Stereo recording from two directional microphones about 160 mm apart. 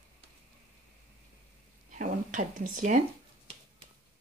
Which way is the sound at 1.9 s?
55° right (ahead or behind).